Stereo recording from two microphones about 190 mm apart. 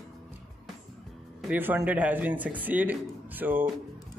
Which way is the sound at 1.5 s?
10° right (ahead or behind).